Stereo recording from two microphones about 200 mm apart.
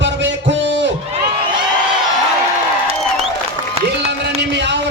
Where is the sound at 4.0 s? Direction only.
55° right (ahead or behind).